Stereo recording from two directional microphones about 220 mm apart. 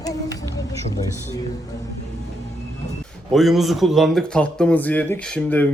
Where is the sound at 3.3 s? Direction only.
Centre (ahead or behind).